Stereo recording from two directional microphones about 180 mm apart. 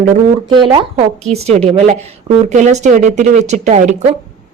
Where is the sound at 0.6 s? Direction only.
30° right (ahead or behind).